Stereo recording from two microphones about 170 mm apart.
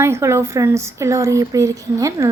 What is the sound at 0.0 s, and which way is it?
A woman's voice, 15° right (ahead or behind).